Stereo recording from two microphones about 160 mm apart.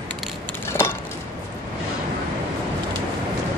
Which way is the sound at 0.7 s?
15° left (ahead or behind).